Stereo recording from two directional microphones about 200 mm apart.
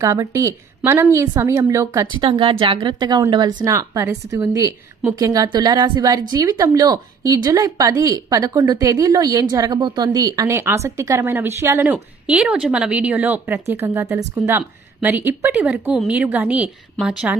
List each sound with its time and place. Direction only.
0.0 s a woman's voice: 15° right (ahead or behind)